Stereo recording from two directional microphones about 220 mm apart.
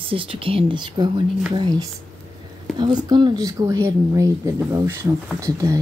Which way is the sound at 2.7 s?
20° right (ahead or behind).